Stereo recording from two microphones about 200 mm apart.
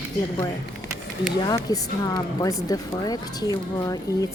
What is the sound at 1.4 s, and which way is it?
Speech, 20° left (ahead or behind).